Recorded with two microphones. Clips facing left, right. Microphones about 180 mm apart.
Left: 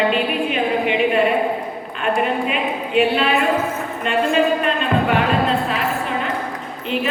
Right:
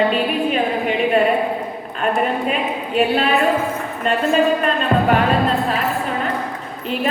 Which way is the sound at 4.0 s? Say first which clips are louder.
Right 1 dB; 40° right (ahead or behind).